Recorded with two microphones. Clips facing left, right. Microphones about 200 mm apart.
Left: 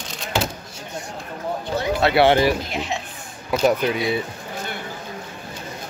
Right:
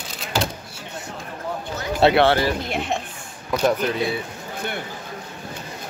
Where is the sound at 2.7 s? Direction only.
55° right (ahead or behind).